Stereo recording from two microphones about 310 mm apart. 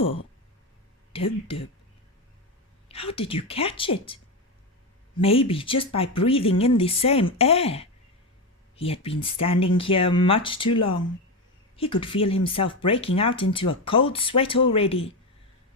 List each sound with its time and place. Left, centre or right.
1.1 s speech: centre
2.9 s speech: centre